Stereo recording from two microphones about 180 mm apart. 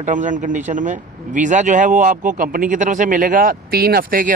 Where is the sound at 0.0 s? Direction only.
45° right (ahead or behind).